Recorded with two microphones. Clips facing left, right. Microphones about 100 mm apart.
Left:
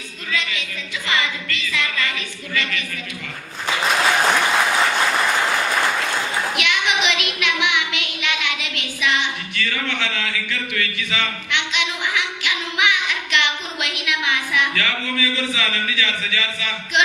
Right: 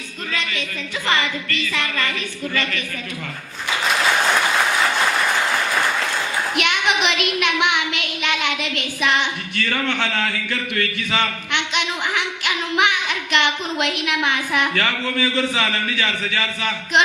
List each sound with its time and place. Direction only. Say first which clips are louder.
0.3 s music: left 1 dB; 45° right (ahead or behind)
1.0 s a woman's voice: right 2 dB; 45° right (ahead or behind)
6.6 s a sound: right 3 dB; 45° right (ahead or behind)